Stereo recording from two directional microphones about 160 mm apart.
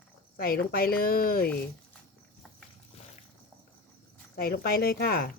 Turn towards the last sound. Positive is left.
turn(degrees=65)  # may be behind; listen again after turning